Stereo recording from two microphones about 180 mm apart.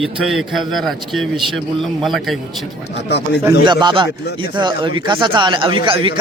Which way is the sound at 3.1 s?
65° left (ahead or behind).